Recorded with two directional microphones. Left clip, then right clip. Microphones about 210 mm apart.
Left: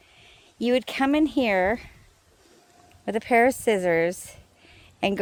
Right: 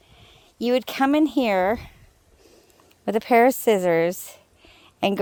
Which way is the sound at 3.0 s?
40° right (ahead or behind).